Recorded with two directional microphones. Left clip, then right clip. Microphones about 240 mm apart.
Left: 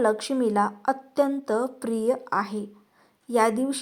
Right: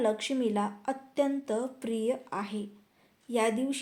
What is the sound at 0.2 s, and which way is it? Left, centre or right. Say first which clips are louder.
A woman's voice: left 7 dB; centre.